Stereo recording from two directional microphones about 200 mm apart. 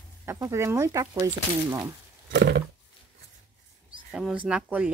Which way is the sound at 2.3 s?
60° right (ahead or behind).